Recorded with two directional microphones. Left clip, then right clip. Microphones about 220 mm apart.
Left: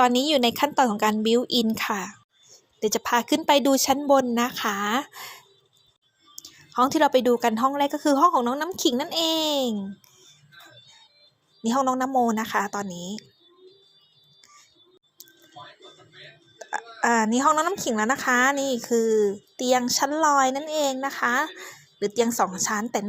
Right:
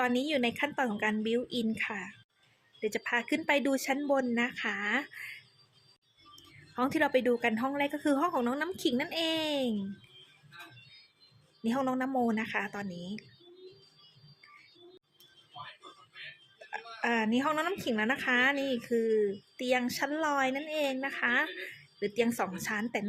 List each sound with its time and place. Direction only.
0.0 s speech: 25° left (ahead or behind)
6.3 s speech: 20° left (ahead or behind)
11.6 s speech: 15° left (ahead or behind)
16.6 s speech: 20° left (ahead or behind)